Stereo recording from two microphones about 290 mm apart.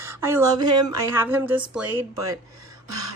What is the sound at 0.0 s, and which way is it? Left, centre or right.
Speech, centre.